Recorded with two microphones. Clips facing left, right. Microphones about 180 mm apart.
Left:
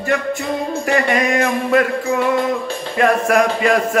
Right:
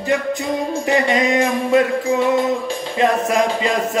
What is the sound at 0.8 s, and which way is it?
Music, 20° right (ahead or behind).